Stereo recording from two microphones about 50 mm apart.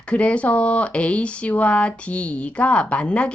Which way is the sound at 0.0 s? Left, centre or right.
Left.